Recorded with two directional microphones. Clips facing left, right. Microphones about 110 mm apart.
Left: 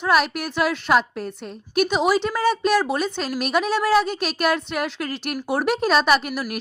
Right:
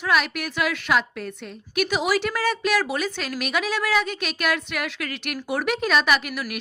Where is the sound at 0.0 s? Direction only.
35° left (ahead or behind).